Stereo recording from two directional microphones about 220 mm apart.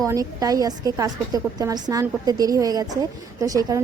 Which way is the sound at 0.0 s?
15° right (ahead or behind).